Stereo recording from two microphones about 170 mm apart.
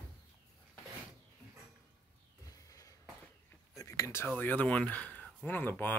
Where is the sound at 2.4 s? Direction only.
20° left (ahead or behind).